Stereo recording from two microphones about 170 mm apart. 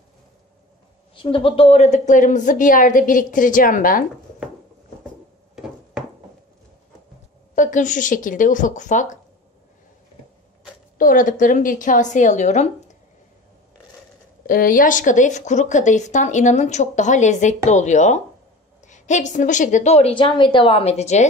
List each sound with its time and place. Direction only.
1.1 s speech: 30° left (ahead or behind); by 4.0 s 55° left (ahead or behind)
7.5 s speech: 50° left (ahead or behind)
11.0 s speech: 50° left (ahead or behind)
14.4 s a woman's voice: 55° left (ahead or behind)